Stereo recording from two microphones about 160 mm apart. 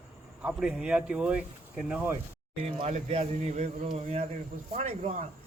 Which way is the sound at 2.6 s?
35° right (ahead or behind).